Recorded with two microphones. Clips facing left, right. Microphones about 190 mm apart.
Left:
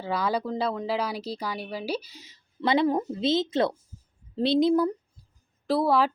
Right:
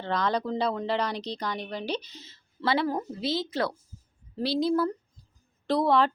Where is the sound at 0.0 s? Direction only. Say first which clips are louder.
Even; 5° left (ahead or behind).